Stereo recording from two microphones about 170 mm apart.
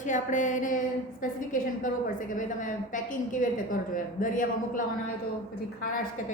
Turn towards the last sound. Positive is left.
turn(degrees=50)  # may be behind; listen again after turning